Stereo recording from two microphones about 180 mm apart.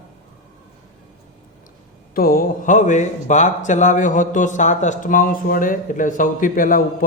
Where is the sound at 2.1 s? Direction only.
55° left (ahead or behind).